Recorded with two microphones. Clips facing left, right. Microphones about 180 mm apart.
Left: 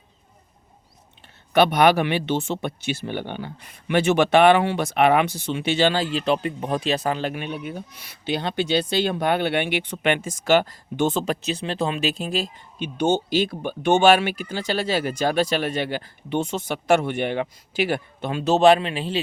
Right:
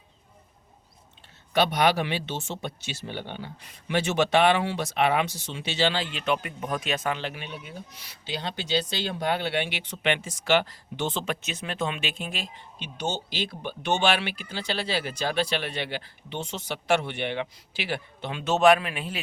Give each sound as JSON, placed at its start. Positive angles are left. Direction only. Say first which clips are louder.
{"t": 1.5, "sound": "speech", "louder": "left 6 dB", "side_deg": 55}
{"t": 13.0, "sound": "speech", "louder": "left 10 dB", "side_deg": 55}